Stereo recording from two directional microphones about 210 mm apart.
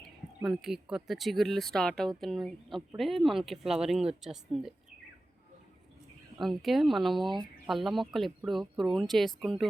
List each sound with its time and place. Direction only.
0.4 s speech: centre (ahead or behind)
6.4 s speech: centre (ahead or behind)